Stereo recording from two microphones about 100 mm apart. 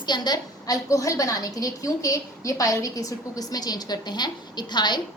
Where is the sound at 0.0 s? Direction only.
45° left (ahead or behind).